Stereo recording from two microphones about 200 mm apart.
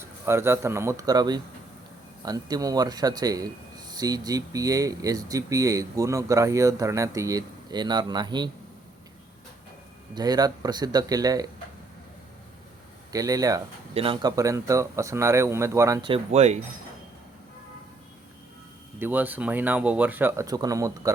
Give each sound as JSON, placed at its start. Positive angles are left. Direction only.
{"t": 0.0, "sound": "speech", "side_deg": -10}
{"t": 10.2, "sound": "speech", "side_deg": -20}
{"t": 13.1, "sound": "speech", "side_deg": -15}
{"t": 18.9, "sound": "speech", "side_deg": -10}